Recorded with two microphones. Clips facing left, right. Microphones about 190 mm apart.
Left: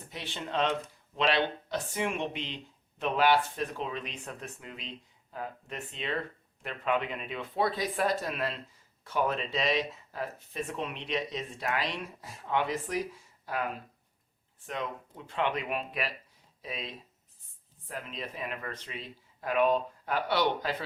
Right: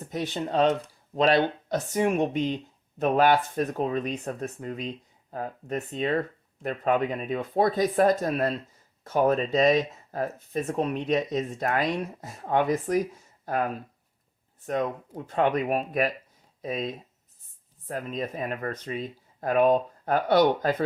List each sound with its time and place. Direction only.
0.0 s speech: 45° right (ahead or behind)
14.7 s speech: 45° right (ahead or behind)